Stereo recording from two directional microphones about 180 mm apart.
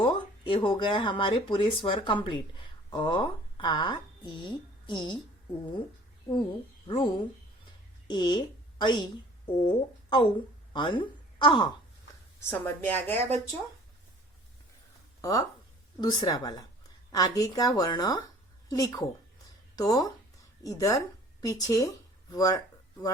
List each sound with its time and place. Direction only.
0.0 s speech: 30° left (ahead or behind)
6.8 s a woman's voice: 30° left (ahead or behind)
12.5 s a woman's voice: 10° left (ahead or behind)
15.2 s a woman's voice: 20° left (ahead or behind)